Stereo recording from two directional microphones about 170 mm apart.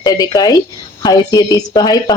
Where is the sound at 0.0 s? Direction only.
20° left (ahead or behind).